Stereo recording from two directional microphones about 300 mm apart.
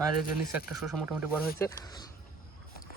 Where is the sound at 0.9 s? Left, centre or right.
Centre.